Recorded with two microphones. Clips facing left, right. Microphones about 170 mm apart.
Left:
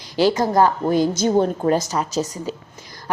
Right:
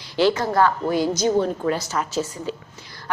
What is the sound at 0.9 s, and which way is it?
A woman's voice, 50° left (ahead or behind).